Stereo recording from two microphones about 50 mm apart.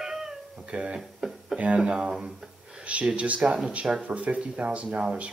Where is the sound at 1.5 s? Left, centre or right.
Right.